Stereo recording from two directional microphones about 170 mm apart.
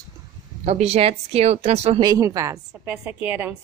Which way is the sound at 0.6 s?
35° right (ahead or behind).